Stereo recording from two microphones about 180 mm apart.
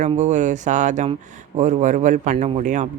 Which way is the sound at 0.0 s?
40° right (ahead or behind).